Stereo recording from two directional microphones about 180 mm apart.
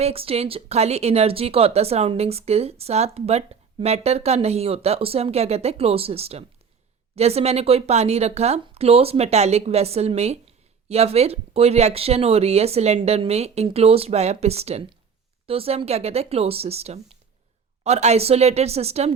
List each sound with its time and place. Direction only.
0.0 s speech: 30° right (ahead or behind)